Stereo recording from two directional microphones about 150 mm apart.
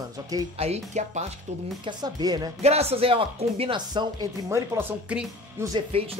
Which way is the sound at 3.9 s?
25° right (ahead or behind).